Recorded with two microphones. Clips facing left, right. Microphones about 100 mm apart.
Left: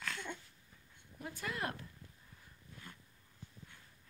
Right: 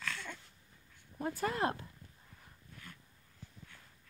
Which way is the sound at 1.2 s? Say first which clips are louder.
Right 7 dB; 40° right (ahead or behind).